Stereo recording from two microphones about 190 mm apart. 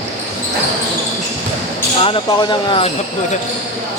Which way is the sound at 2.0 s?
25° left (ahead or behind).